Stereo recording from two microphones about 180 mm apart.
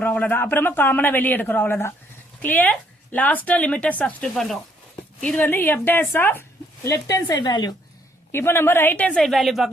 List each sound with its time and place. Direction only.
0.0 s a woman's voice: 10° left (ahead or behind)